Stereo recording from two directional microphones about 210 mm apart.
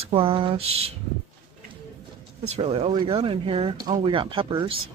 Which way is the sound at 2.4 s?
30° right (ahead or behind).